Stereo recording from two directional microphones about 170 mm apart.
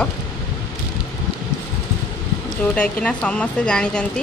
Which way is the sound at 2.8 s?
5° left (ahead or behind).